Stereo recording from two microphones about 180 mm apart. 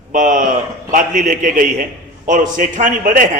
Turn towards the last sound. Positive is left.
turn(degrees=-45)  # may be behind; listen again after turning